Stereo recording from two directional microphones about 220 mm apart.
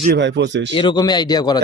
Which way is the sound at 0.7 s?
20° left (ahead or behind).